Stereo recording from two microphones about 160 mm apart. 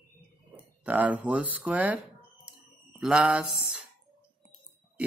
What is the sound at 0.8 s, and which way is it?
Mantra, 10° right (ahead or behind).